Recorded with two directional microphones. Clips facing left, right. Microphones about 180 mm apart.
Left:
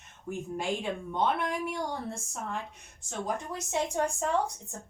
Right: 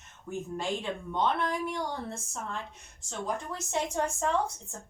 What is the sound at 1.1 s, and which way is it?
Speech, 10° left (ahead or behind).